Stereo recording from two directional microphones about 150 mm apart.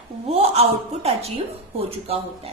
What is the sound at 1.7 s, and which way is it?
Speech, 40° right (ahead or behind).